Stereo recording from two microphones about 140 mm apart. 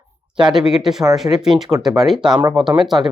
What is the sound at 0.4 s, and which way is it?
Speech, 5° right (ahead or behind).